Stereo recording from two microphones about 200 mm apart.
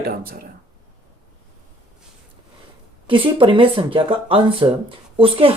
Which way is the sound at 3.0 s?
25° right (ahead or behind).